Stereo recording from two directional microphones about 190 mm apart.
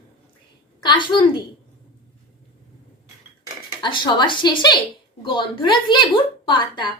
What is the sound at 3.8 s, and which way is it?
A woman's voice, 25° left (ahead or behind).